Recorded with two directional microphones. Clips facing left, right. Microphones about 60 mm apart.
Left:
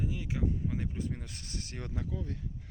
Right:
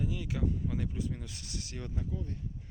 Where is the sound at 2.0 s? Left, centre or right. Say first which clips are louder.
Left 2 dB; left.